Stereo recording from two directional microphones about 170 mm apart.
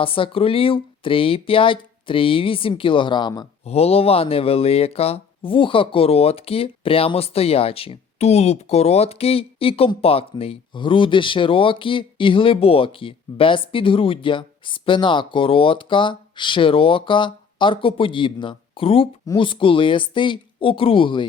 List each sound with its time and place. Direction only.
0.0 s speech: 30° left (ahead or behind)
3.7 s speech: 35° left (ahead or behind)